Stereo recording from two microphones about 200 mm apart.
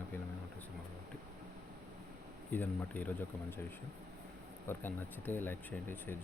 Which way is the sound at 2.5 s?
10° left (ahead or behind).